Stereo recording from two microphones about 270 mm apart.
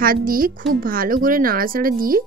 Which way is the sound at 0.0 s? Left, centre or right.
Right.